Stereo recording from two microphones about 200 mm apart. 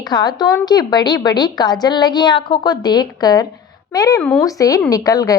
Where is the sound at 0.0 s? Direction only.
20° left (ahead or behind).